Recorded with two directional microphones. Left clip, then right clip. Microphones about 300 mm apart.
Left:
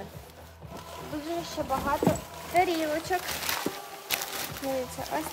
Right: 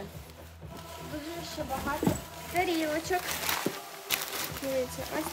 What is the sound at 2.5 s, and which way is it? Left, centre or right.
Speech, centre.